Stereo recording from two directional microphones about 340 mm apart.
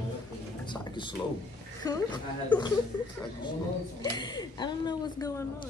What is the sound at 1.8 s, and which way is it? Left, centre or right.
Speech, centre.